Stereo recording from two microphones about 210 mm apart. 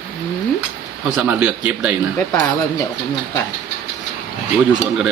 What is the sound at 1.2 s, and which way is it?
Speech, 5° right (ahead or behind).